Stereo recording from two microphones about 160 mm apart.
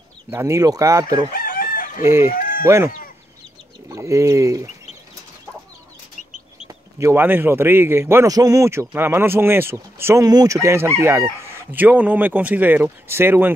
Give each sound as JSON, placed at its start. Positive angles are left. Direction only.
{"t": 0.3, "sound": "speech", "side_deg": -15}
{"t": 1.3, "sound": "chicken", "side_deg": 60}
{"t": 2.0, "sound": "a man's voice", "side_deg": -15}
{"t": 2.3, "sound": "chicken", "side_deg": 60}
{"t": 2.6, "sound": "a man's voice", "side_deg": -15}
{"t": 3.9, "sound": "speech", "side_deg": -20}
{"t": 6.7, "sound": "a man's voice", "side_deg": -15}